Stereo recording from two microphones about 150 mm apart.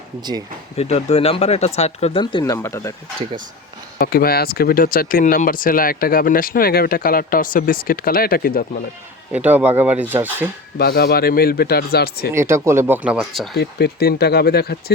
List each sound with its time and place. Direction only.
0.2 s speech: 30° right (ahead or behind)
0.8 s speech: 45° left (ahead or behind)
2.4 s speech: 20° left (ahead or behind)
3.9 s speech: 80° left
9.3 s speech: 10° right (ahead or behind)
10.8 s speech: 90° left
12.3 s speech: 15° right (ahead or behind); by 13.6 s centre (ahead or behind)
13.6 s speech: 90° left